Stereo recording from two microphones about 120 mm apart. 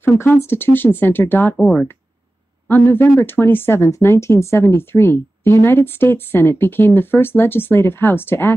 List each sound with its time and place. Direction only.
0.0 s speech: 20° left (ahead or behind)
1.6 s speech: 5° left (ahead or behind)
2.7 s speech: 15° left (ahead or behind)